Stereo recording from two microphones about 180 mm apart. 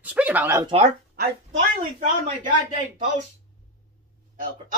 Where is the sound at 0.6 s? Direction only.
25° right (ahead or behind).